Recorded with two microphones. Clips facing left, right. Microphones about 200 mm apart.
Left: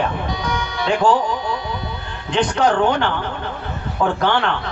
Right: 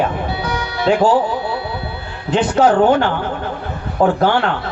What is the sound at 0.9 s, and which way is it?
Speech, 5° right (ahead or behind).